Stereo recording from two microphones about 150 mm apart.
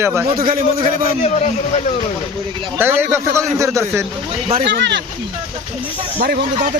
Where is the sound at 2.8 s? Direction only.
15° right (ahead or behind).